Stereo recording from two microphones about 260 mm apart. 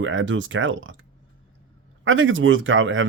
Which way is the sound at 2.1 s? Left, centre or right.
Right.